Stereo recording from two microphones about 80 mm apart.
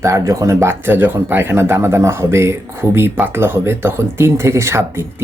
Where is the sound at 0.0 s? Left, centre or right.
Right.